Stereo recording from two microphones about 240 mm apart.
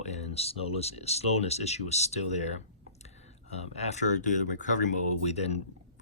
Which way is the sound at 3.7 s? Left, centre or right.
Left.